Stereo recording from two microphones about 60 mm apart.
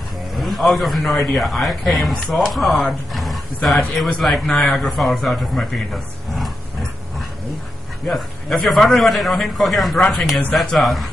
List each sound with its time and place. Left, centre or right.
0.4 s a man's voice: centre
8.1 s a man's voice: centre